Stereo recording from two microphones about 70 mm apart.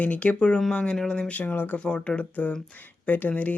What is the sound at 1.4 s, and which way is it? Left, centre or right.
Speech, left.